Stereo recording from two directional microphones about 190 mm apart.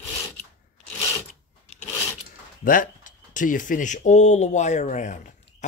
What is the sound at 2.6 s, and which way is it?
Speech, 45° left (ahead or behind).